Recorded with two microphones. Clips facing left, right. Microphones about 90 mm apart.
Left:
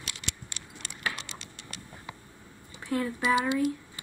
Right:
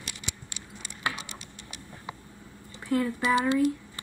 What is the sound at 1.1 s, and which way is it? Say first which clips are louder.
Typing: right 1 dB; 90° left.